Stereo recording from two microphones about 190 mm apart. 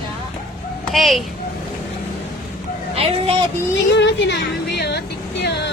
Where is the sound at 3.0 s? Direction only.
30° right (ahead or behind).